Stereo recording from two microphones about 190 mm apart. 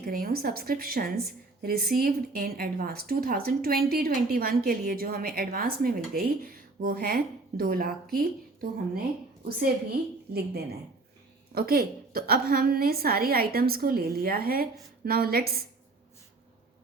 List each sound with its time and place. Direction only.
0.0 s a woman's voice: 50° right (ahead or behind)